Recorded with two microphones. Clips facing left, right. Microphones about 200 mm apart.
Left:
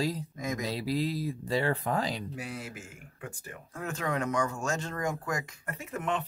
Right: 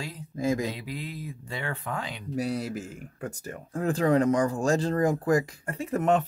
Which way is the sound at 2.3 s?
40° right (ahead or behind).